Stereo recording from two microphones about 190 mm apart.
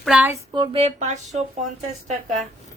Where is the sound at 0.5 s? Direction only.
25° right (ahead or behind).